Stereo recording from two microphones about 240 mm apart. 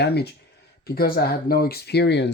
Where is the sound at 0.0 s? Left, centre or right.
Left.